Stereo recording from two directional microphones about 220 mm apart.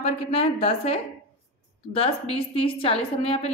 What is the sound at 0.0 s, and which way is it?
A woman's voice, 30° left (ahead or behind).